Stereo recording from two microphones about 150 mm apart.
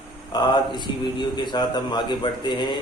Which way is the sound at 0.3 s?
30° left (ahead or behind).